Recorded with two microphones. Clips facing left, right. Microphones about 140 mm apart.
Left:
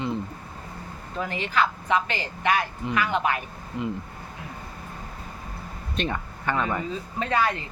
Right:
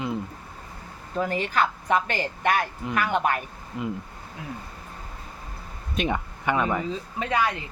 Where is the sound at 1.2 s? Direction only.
45° right (ahead or behind).